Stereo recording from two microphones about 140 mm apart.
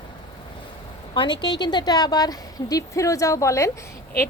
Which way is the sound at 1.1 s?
35° left (ahead or behind).